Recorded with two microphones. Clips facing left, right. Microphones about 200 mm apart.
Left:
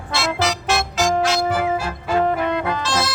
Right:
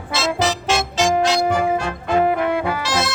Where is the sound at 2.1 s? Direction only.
10° right (ahead or behind).